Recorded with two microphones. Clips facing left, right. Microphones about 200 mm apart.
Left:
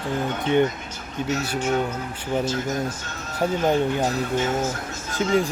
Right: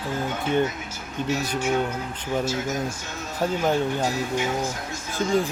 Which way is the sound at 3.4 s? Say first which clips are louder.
Left 2 dB; 15° left (ahead or behind).